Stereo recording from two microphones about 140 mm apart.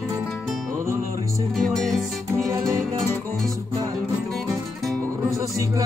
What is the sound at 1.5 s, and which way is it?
Music, centre (ahead or behind).